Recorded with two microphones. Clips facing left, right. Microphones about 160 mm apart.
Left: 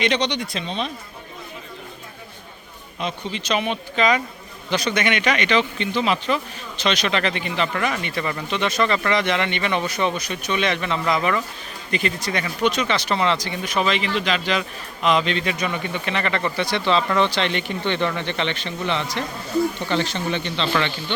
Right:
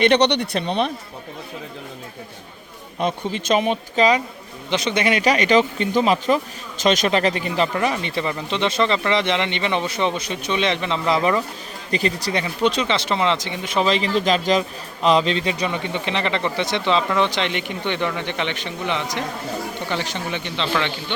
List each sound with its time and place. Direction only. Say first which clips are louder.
0.0 s speech: right 6 dB; 65° right (ahead or behind)
3.0 s speech: right 5 dB; 50° right (ahead or behind)
4.7 s speech: right 2 dB; 25° right (ahead or behind)
7.7 s speech: right 2 dB; 25° right (ahead or behind)